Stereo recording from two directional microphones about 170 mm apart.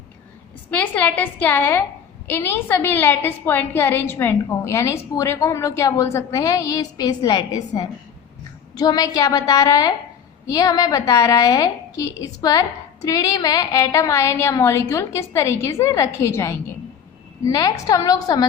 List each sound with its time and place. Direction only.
0.7 s a woman's voice: 10° left (ahead or behind)